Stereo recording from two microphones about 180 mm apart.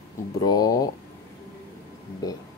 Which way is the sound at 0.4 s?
20° left (ahead or behind).